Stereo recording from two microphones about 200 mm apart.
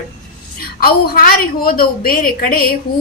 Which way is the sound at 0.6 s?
50° left (ahead or behind).